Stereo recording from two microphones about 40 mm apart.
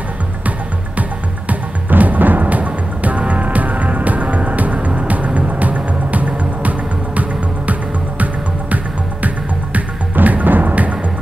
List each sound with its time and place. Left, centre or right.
1.5 s music: right
8.2 s music: right